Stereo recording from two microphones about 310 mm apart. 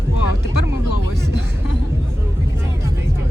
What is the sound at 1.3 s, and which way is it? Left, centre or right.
Music, right.